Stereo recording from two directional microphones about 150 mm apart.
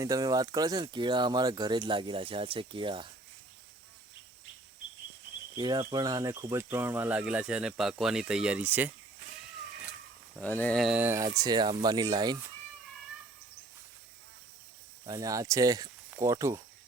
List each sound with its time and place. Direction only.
0.0 s speech: 25° right (ahead or behind)
5.5 s speech: 25° right (ahead or behind); by 8.9 s 10° right (ahead or behind)
10.4 s speech: 10° left (ahead or behind)
10.8 s speech: centre (ahead or behind)
11.0 s speech: 15° right (ahead or behind)
15.0 s speech: 25° right (ahead or behind)